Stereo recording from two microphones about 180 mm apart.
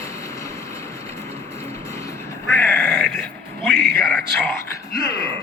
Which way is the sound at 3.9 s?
15° left (ahead or behind).